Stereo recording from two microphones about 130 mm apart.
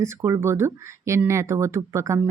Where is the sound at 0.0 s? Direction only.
20° right (ahead or behind).